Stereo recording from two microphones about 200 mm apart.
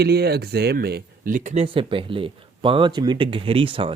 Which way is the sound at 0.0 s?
55° right (ahead or behind).